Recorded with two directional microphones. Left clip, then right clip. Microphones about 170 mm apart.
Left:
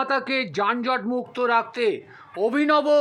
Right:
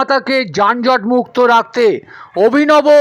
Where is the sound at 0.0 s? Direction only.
40° right (ahead or behind).